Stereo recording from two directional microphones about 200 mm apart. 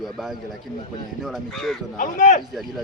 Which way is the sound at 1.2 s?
Centre (ahead or behind).